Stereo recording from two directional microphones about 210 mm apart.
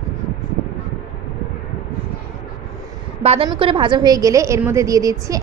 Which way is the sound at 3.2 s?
30° right (ahead or behind).